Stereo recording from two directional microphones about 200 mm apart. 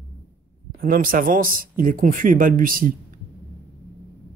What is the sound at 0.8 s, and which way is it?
A man's voice, 45° right (ahead or behind).